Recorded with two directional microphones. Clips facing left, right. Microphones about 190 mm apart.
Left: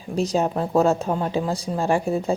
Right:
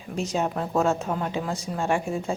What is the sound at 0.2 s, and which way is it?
Speech, 35° left (ahead or behind).